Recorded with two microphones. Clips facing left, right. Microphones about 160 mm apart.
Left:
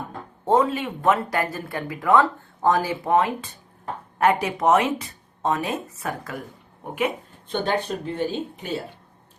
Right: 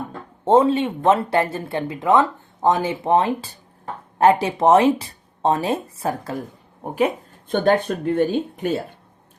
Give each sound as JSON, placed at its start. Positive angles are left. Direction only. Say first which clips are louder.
{"t": 0.4, "sound": "speech", "louder": "right 5 dB", "side_deg": -25}
{"t": 7.5, "sound": "speech", "louder": "right 6 dB", "side_deg": -50}